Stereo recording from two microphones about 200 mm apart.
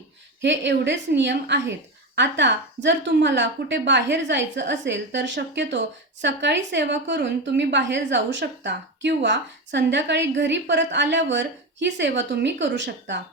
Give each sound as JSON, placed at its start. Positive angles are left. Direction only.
{"t": 0.4, "sound": "a woman's voice", "side_deg": -65}